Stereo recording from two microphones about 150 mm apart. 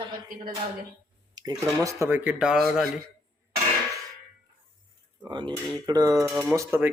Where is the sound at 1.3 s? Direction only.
25° right (ahead or behind).